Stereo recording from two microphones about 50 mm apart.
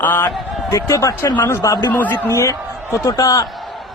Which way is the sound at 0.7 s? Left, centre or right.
Left.